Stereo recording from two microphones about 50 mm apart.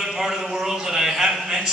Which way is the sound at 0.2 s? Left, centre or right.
Centre.